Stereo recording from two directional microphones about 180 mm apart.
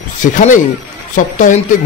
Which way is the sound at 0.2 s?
45° left (ahead or behind).